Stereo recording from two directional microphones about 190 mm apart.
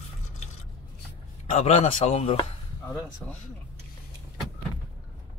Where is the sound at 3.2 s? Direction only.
Centre (ahead or behind).